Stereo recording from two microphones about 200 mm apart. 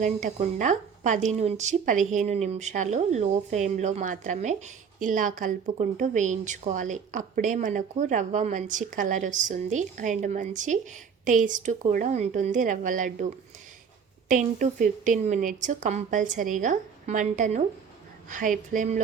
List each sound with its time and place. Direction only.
0.0 s a woman's voice: 35° right (ahead or behind)
14.3 s a woman's voice: 40° right (ahead or behind)